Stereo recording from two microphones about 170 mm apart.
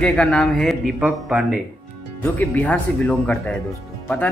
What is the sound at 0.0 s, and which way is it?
Speech, 5° left (ahead or behind).